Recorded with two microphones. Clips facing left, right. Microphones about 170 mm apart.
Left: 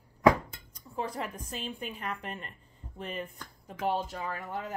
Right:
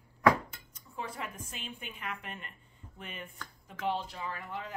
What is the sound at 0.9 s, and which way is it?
A woman's voice, 35° left (ahead or behind).